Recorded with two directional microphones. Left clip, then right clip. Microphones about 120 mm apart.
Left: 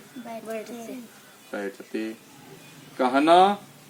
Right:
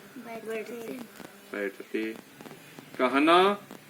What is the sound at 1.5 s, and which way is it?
Speech, 30° left (ahead or behind).